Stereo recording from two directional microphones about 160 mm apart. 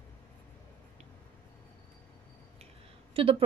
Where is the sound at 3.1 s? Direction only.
35° right (ahead or behind).